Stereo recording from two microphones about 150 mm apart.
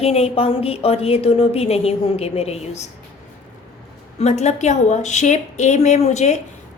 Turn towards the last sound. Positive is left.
turn(degrees=50)  # may be behind; listen again after turning